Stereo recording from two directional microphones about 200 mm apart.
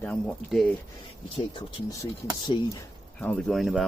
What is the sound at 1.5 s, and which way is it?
Speech, 25° left (ahead or behind).